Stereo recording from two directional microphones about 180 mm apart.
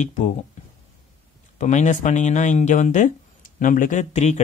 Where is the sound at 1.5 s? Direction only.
40° left (ahead or behind).